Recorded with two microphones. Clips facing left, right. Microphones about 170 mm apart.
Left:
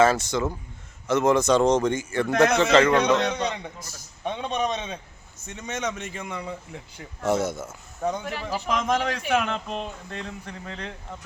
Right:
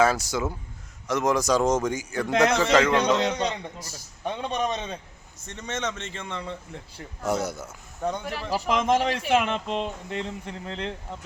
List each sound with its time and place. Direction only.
0.0 s a man's voice: centre (ahead or behind)
4.2 s a man's voice: centre (ahead or behind)
8.7 s speech: 25° right (ahead or behind)